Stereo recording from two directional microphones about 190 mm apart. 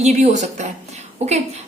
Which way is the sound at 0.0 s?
35° right (ahead or behind).